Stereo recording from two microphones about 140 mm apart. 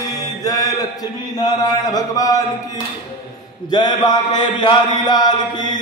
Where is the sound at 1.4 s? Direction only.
25° left (ahead or behind).